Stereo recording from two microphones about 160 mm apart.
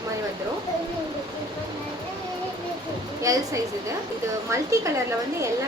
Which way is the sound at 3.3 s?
20° right (ahead or behind).